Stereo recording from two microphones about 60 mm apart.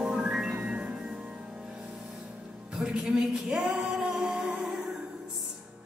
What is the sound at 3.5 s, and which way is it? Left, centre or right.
Female singing, centre.